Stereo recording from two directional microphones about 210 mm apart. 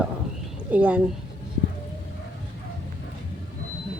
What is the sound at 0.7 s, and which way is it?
Speech, 5° right (ahead or behind).